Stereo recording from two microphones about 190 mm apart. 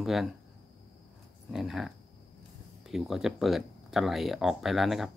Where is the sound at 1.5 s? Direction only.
Centre (ahead or behind).